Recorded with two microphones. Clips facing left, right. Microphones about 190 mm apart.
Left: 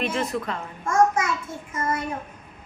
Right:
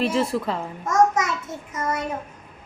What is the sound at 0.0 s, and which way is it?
Speech, 30° right (ahead or behind).